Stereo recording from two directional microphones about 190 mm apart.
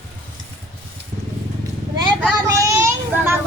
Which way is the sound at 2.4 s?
15° right (ahead or behind).